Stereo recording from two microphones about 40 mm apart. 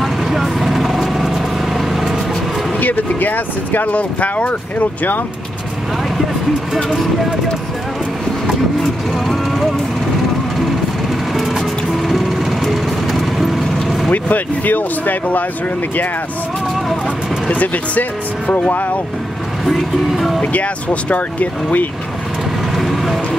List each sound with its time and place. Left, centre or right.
0.0 s vehicle: centre
2.8 s speech: left
3.9 s speech: left
6.7 s speech: centre
9.3 s speech: centre
11.3 s music: centre
14.1 s speech: left
17.5 s speech: left
19.6 s speech: centre
20.5 s speech: left
22.8 s vehicle: centre